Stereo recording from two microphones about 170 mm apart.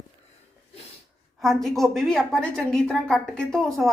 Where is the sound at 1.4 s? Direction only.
Centre (ahead or behind).